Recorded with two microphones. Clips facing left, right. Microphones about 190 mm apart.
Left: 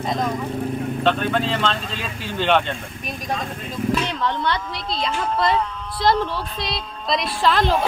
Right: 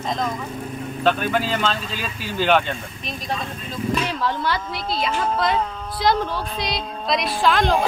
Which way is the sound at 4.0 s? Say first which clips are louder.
Even; 5° right (ahead or behind).